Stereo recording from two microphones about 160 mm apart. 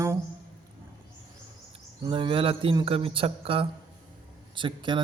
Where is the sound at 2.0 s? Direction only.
30° right (ahead or behind).